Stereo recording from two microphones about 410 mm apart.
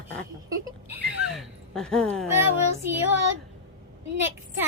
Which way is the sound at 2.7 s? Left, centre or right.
Right.